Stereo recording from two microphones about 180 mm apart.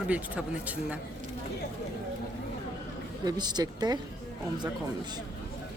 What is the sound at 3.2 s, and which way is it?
Speech, 25° right (ahead or behind).